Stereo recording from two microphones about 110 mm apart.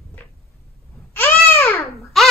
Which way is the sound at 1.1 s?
20° left (ahead or behind).